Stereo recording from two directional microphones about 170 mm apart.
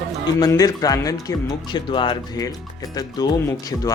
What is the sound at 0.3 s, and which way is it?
Speech, 20° left (ahead or behind).